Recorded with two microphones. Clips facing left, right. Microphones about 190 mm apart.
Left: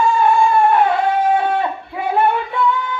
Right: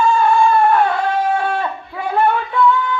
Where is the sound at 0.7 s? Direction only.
20° left (ahead or behind).